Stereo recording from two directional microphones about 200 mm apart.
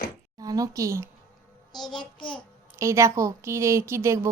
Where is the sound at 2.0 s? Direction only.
25° left (ahead or behind).